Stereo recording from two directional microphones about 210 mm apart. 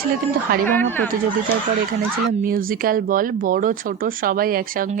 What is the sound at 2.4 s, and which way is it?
Speech, 40° right (ahead or behind).